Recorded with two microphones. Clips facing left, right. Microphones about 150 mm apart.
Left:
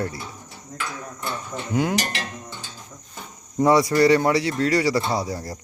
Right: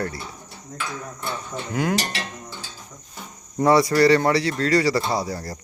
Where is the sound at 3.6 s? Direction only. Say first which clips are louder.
Even; 15° left (ahead or behind).